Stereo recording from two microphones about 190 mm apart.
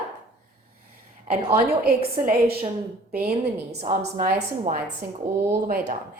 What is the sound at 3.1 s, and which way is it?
Speech, 55° right (ahead or behind).